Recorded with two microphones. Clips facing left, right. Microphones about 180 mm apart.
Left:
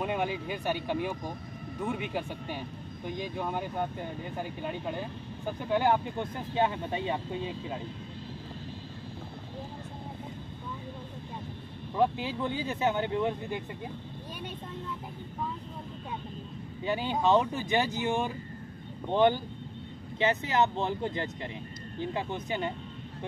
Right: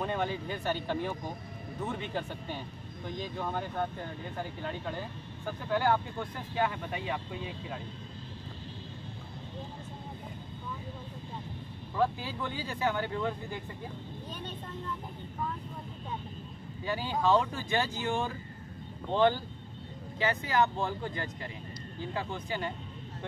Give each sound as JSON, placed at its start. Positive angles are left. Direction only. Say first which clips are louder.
{"t": 0.0, "sound": "speech", "louder": "left 2 dB", "side_deg": 10}
{"t": 12.0, "sound": "speech", "louder": "left 3 dB", "side_deg": 20}
{"t": 16.8, "sound": "speech", "louder": "left 2 dB", "side_deg": 20}